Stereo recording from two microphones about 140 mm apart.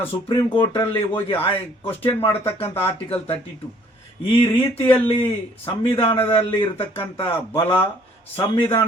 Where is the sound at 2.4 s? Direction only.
45° left (ahead or behind).